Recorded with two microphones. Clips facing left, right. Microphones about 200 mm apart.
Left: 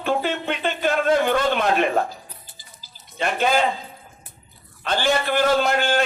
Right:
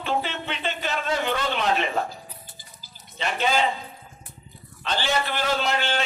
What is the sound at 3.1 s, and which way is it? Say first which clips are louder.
Speech: left 4 dB; 50° left (ahead or behind).